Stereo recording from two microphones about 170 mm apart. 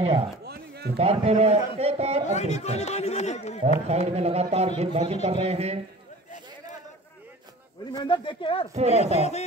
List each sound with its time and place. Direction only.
0.5 s a sound: 70° right (ahead or behind)
0.9 s a man's voice: 35° right (ahead or behind)
2.2 s speech: 40° left (ahead or behind)
3.6 s a man's voice: 40° right (ahead or behind)
7.9 s speech: 25° left (ahead or behind)
8.7 s a man's voice: 40° right (ahead or behind)